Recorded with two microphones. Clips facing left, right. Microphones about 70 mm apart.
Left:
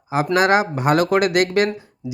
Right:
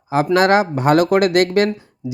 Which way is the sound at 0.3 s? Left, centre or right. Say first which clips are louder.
Right 2 dB; centre.